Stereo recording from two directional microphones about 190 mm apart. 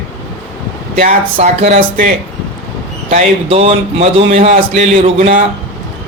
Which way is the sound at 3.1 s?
35° right (ahead or behind).